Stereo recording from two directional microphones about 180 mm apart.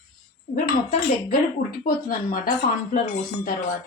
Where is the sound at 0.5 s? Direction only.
50° left (ahead or behind).